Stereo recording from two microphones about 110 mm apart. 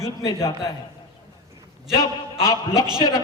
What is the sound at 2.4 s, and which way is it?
Speech, 35° left (ahead or behind).